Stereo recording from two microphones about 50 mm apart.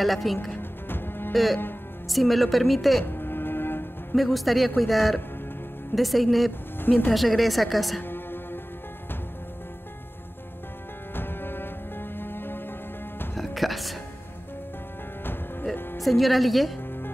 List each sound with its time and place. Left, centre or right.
0.0 s a man's voice: centre
0.5 s music: left
1.3 s a man's voice: centre
3.1 s music: left
4.1 s a man's voice: centre
6.8 s speech: left
7.2 s a man's voice: centre
8.0 s music: left
11.1 s music: left
13.4 s music: centre
16.0 s a man's voice: centre